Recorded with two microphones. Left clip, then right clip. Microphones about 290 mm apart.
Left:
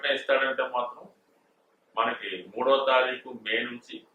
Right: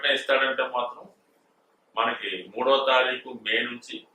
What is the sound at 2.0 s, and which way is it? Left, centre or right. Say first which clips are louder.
A man's voice: right 2 dB; centre.